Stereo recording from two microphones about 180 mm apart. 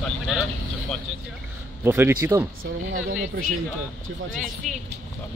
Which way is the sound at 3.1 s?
45° right (ahead or behind).